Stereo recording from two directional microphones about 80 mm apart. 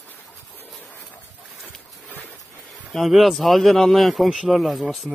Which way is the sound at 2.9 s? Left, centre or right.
Centre.